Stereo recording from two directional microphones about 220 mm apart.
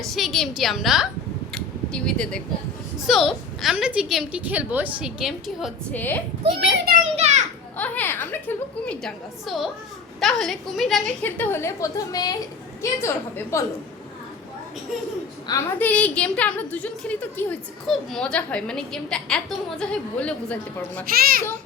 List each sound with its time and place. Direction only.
0.0 s a woman's voice: centre (ahead or behind)
1.5 s a sound: 5° left (ahead or behind)
3.0 s a woman's voice: centre (ahead or behind)
7.2 s children playing: 30° right (ahead or behind)
7.8 s a woman's voice: 10° left (ahead or behind)
15.4 s a woman's voice: 10° left (ahead or behind)
21.1 s a child's voice: 40° right (ahead or behind)